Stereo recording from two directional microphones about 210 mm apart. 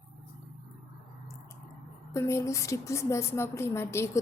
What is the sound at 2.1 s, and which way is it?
A woman's voice, 15° left (ahead or behind).